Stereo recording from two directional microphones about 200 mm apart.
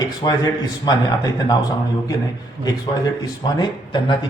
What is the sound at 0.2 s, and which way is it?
Speech, 20° left (ahead or behind).